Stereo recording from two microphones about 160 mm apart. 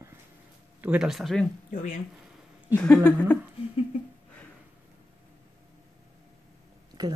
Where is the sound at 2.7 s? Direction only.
5° left (ahead or behind).